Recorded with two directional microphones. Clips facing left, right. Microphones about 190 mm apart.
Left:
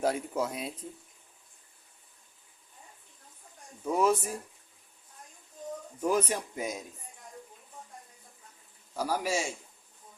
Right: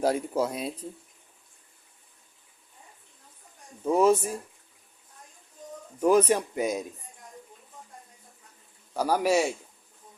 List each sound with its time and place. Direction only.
0.0 s speech: 35° right (ahead or behind)
3.8 s speech: 25° right (ahead or behind)
6.0 s speech: 75° right (ahead or behind)
8.9 s a man's voice: 65° right (ahead or behind)